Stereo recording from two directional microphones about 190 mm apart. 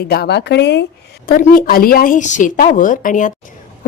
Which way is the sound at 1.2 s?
50° left (ahead or behind).